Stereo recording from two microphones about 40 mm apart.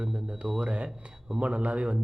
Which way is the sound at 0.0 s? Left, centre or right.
Centre.